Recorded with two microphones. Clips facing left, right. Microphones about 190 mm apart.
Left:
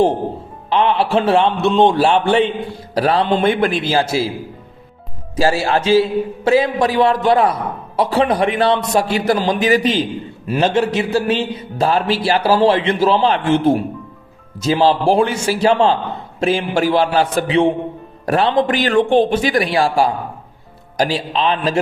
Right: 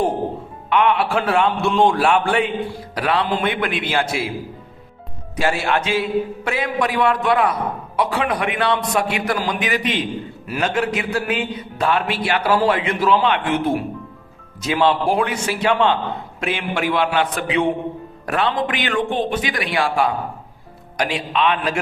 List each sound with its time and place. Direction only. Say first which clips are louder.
0.7 s a man's voice: left 2 dB; 30° left (ahead or behind)
2.9 s a man's voice: left 6 dB; 40° left (ahead or behind)
5.4 s a man's voice: left 4 dB; 35° left (ahead or behind)